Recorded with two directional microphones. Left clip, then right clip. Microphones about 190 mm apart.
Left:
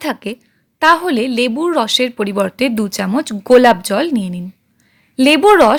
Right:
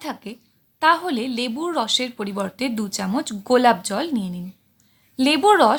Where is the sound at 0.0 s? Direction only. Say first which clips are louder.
Left 10 dB; 35° left (ahead or behind).